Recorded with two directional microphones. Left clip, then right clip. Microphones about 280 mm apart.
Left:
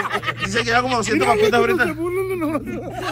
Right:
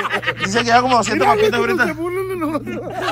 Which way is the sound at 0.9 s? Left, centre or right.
Centre.